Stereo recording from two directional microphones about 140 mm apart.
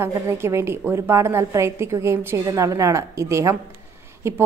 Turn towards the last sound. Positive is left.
turn(degrees=-20)  # may be behind; listen again after turning